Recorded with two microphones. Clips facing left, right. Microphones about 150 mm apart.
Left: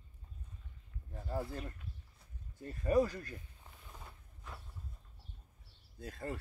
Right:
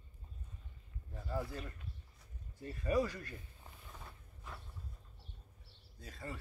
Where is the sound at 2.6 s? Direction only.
45° left (ahead or behind).